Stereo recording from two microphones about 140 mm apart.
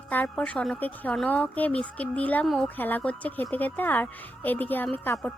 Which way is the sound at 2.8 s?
15° left (ahead or behind).